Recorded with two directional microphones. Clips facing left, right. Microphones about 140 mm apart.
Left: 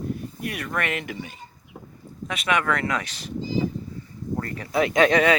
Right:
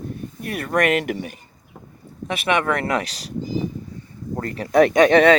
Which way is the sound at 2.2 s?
25° right (ahead or behind).